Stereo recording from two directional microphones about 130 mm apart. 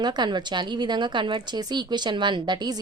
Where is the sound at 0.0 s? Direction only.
35° right (ahead or behind).